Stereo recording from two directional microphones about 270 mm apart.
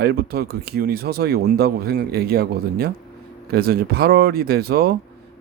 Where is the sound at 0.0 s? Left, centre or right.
Right.